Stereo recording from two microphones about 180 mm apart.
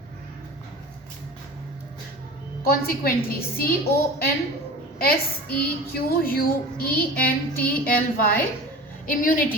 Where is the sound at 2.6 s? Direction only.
55° left (ahead or behind).